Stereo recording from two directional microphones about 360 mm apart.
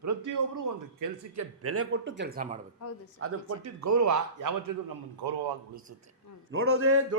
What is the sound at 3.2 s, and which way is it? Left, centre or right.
A man's voice, right.